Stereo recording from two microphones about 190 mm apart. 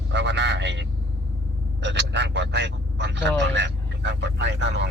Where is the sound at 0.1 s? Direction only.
65° right (ahead or behind).